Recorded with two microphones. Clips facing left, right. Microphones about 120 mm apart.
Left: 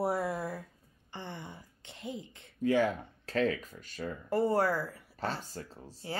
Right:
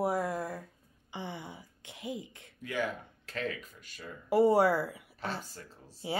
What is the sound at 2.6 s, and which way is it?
Speech, 30° left (ahead or behind).